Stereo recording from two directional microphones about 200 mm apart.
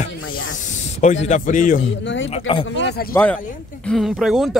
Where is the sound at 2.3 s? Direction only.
25° left (ahead or behind).